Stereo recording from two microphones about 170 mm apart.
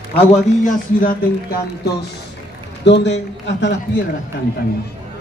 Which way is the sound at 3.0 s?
90° left.